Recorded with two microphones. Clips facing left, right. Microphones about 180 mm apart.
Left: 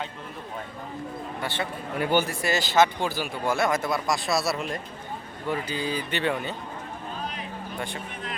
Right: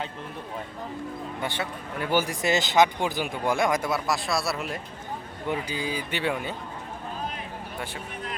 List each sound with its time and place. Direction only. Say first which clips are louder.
1.4 s speech: left 1 dB; 15° right (ahead or behind)